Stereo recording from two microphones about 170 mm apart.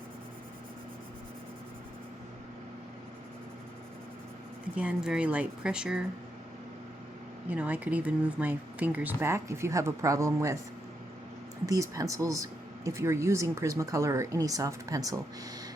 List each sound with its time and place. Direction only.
4.7 s speech: 5° right (ahead or behind)
7.5 s speech: 10° right (ahead or behind)
11.6 s speech: 20° right (ahead or behind)